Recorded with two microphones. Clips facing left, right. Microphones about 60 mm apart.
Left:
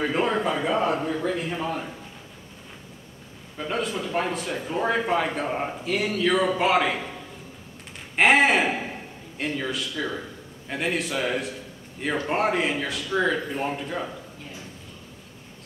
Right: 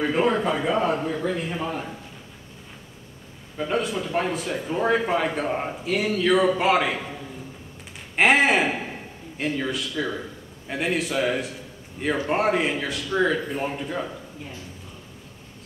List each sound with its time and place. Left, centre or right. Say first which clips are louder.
0.0 s speech: right 2 dB; centre
3.5 s speech: right 3 dB; centre
8.2 s a man's voice: even; centre